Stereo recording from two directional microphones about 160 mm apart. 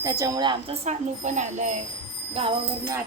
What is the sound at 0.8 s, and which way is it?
Speech, 45° right (ahead or behind).